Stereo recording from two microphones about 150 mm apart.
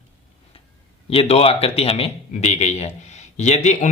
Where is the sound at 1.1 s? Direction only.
40° left (ahead or behind).